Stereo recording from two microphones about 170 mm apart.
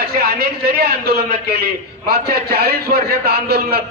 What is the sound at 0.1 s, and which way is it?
A man's voice, 65° right (ahead or behind).